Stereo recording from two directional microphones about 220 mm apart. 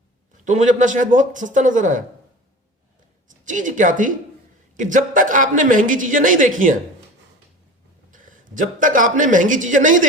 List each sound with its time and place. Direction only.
0.4 s speech: 35° right (ahead or behind)
3.4 s speech: 35° right (ahead or behind)
8.1 s a man's voice: 35° right (ahead or behind)